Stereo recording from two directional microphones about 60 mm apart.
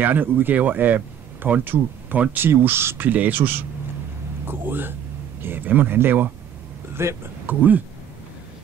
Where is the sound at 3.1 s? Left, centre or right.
Right.